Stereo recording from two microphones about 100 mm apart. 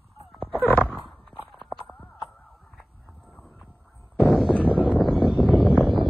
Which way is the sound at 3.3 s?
Centre (ahead or behind).